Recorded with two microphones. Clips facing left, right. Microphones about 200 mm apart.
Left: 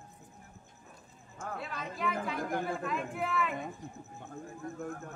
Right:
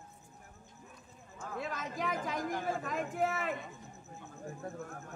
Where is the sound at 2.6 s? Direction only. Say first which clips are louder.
Left 1 dB; 45° right (ahead or behind).